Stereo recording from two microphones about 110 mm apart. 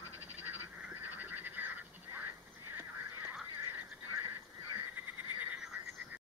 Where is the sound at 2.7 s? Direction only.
20° right (ahead or behind).